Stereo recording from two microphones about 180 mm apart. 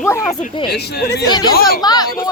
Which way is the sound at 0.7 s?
65° left (ahead or behind).